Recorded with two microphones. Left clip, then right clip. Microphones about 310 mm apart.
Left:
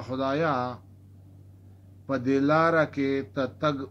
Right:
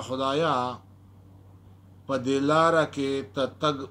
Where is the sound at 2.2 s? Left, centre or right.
Right.